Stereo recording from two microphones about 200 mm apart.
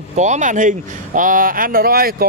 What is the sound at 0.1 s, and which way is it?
Speech, 35° right (ahead or behind).